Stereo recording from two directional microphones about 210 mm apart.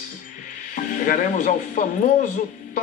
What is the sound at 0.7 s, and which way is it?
Speech, 35° left (ahead or behind).